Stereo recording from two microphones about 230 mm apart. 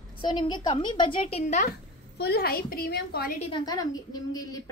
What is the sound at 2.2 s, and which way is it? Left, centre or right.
A woman's voice, left.